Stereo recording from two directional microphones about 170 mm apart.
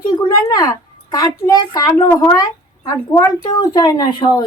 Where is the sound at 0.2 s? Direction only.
25° left (ahead or behind).